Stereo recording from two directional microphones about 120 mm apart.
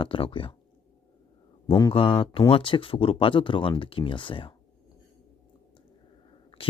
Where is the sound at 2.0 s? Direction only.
50° left (ahead or behind).